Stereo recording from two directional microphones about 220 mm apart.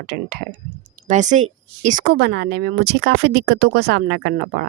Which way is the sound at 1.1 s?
35° right (ahead or behind).